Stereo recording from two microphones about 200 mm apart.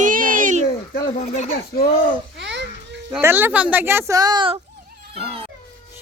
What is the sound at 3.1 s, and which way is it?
Speech, 10° right (ahead or behind).